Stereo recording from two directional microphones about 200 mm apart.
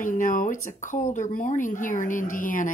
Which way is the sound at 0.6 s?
40° left (ahead or behind).